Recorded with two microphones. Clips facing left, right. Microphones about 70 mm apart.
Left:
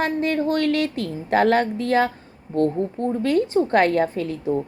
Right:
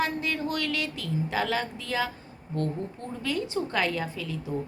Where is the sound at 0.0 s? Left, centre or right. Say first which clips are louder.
Left 7 dB; left.